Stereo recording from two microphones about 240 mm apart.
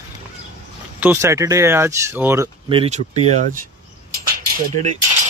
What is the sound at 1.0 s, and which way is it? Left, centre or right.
Speech, centre.